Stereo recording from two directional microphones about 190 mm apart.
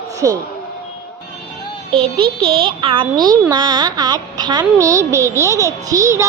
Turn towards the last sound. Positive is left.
turn(degrees=-15)  # may be behind; listen again after turning